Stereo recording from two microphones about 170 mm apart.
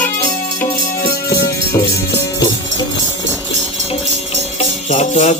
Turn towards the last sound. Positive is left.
turn(degrees=40)  # may be behind; listen again after turning